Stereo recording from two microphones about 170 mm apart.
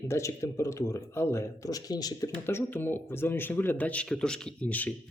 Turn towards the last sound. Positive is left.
turn(degrees=10)  # may be behind; listen again after turning